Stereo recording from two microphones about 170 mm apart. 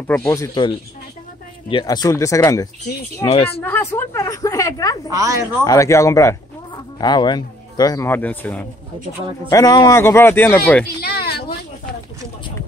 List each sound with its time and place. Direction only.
0.1 s speech: 15° left (ahead or behind)
1.7 s speech: 25° left (ahead or behind)
3.6 s speech: 10° left (ahead or behind)
5.1 s speech: 20° right (ahead or behind)
5.6 s speech: 20° left (ahead or behind)
9.5 s speech: 20° left (ahead or behind)
11.0 s a sound: 65° left (ahead or behind)